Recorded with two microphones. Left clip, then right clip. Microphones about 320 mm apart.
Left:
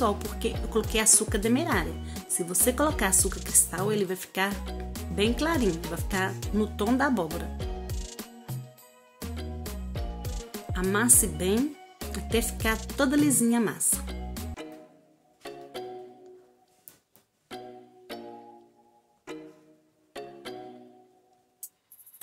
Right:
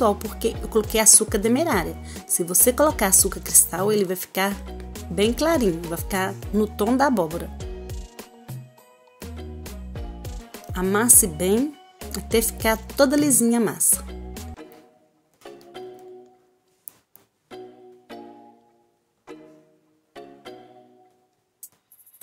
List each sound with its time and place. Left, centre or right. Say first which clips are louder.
0.0 s speech: right 6 dB; centre
7.5 s music: right 1 dB; centre
10.7 s speech: right 5 dB; centre